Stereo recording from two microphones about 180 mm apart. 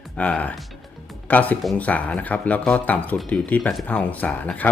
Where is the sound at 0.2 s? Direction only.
10° left (ahead or behind).